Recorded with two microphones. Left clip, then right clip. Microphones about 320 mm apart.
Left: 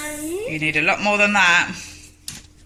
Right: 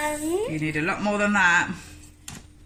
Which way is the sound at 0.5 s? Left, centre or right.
Centre.